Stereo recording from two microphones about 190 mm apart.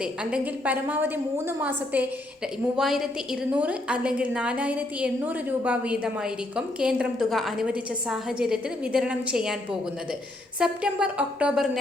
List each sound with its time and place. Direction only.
0.0 s a woman's voice: 5° right (ahead or behind)
10.6 s a woman's voice: 5° right (ahead or behind)